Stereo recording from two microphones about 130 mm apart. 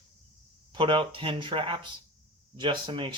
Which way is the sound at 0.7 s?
40° right (ahead or behind).